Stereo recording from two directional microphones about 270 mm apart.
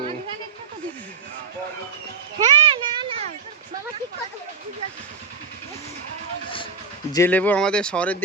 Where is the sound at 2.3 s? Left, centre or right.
Centre.